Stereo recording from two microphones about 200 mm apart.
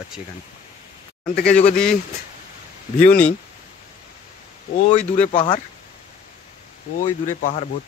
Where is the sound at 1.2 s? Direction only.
55° left (ahead or behind).